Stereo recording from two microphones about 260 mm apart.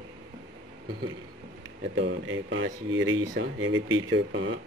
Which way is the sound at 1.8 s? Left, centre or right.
Right.